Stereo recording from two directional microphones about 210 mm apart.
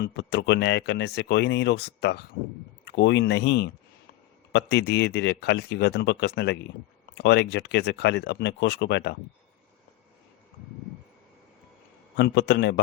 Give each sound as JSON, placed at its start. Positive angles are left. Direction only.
{"t": 0.0, "sound": "speech", "side_deg": 55}
{"t": 12.1, "sound": "a man's voice", "side_deg": 55}